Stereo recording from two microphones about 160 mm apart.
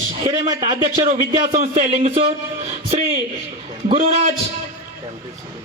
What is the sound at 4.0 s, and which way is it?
Speech, 50° right (ahead or behind).